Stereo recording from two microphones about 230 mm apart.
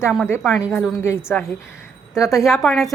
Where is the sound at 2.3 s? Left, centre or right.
Centre.